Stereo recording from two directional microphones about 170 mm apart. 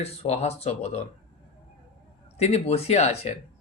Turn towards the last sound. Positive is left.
turn(degrees=40)  # may be behind; listen again after turning